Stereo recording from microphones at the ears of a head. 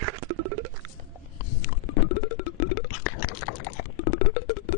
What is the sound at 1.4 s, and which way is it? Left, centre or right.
Music, left.